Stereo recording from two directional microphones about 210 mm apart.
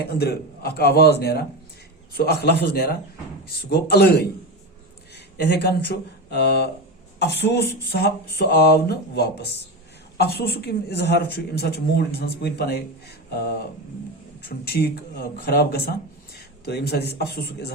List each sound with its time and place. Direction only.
0.0 s speech: 50° left (ahead or behind)
14.6 s speech: 50° left (ahead or behind)